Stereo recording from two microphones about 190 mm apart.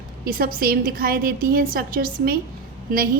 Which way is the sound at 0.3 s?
50° right (ahead or behind).